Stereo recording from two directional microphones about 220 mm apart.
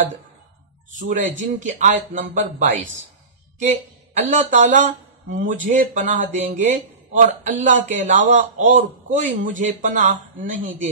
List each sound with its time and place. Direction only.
0.9 s a man's voice: 35° right (ahead or behind)